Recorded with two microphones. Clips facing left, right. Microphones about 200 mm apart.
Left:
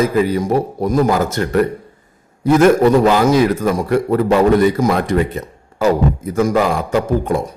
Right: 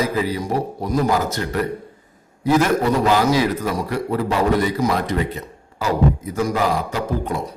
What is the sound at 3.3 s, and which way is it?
A man's voice, 50° left (ahead or behind).